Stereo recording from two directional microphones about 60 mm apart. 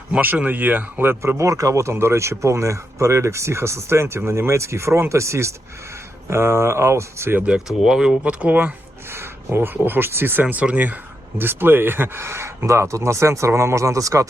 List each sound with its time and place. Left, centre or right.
0.2 s speech: right
1.4 s speech: right
7.7 s speech: centre; by 8.7 s right
9.0 s a sound: right
9.7 s speech: right
10.4 s speech: right